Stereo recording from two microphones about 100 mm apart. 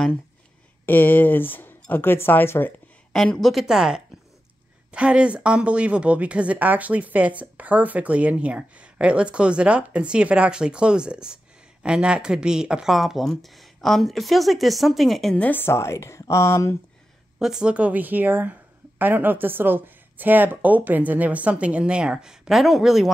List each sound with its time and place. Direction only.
0.8 s speech: 20° left (ahead or behind)
3.1 s speech: 5° left (ahead or behind)
15.3 s speech: 15° left (ahead or behind)
17.4 s speech: 5° right (ahead or behind)